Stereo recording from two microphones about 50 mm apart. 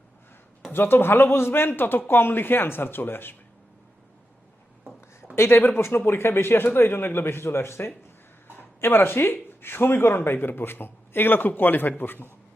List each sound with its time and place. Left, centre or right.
0.7 s speech: left
4.9 s a sound: left
6.1 s speech: left
8.8 s speech: left